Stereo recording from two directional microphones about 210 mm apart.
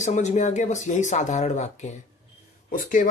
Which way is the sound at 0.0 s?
35° left (ahead or behind).